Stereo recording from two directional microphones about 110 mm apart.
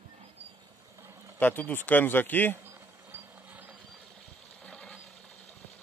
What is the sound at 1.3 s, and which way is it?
Speech, 15° left (ahead or behind).